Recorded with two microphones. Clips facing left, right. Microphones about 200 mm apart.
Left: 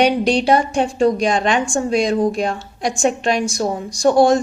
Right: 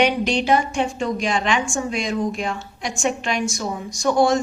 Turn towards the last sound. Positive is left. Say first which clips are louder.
# left 5 dB
turn(degrees=35)  # may be behind; listen again after turning